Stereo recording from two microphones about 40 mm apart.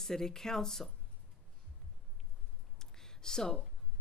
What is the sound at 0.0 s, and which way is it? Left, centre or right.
Speech, centre.